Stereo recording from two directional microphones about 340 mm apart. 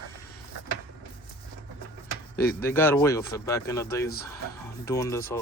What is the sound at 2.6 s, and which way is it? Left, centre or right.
Speech, centre.